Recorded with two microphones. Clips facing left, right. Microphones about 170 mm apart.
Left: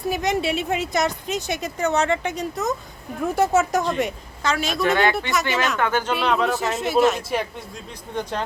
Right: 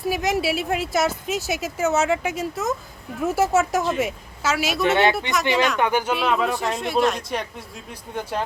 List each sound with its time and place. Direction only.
0.0 s a woman's voice: centre (ahead or behind)
4.8 s speech: 20° right (ahead or behind)
6.1 s a woman's voice: centre (ahead or behind)
8.1 s speech: 10° right (ahead or behind)